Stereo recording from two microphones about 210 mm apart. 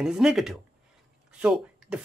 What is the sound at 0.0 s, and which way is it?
Speech, centre (ahead or behind).